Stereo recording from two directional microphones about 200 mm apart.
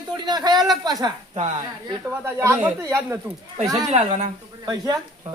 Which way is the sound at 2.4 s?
15° right (ahead or behind).